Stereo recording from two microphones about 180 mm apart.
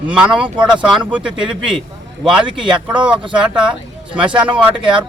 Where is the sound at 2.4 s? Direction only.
25° right (ahead or behind).